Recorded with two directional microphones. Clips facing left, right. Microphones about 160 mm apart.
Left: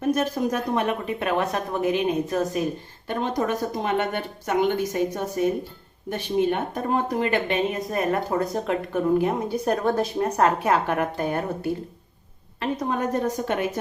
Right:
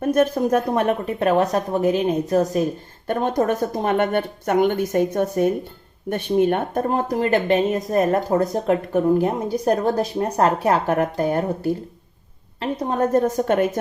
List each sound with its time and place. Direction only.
0.0 s speech: 55° right (ahead or behind)
3.1 s a woman's voice: 50° right (ahead or behind)